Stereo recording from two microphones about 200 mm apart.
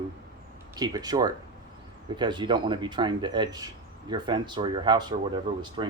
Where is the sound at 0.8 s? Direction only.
20° right (ahead or behind).